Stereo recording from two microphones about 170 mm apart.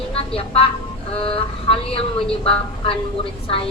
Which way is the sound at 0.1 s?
35° left (ahead or behind).